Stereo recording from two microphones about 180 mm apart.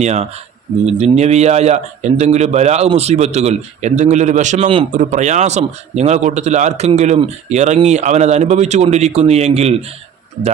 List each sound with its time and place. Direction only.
0.0 s a man's voice: 35° right (ahead or behind)